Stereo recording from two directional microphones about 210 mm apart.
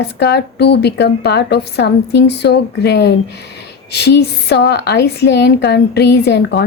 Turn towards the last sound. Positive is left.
turn(degrees=50)  # may be behind; listen again after turning